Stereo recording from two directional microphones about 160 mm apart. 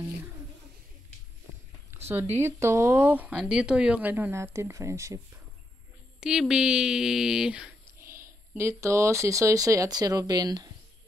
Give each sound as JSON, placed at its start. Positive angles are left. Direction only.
{"t": 1.9, "sound": "speech", "side_deg": -15}
{"t": 6.2, "sound": "a woman's voice", "side_deg": -5}
{"t": 8.0, "sound": "speech", "side_deg": -15}